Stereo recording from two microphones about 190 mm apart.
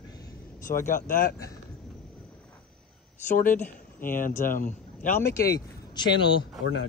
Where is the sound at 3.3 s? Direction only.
45° left (ahead or behind).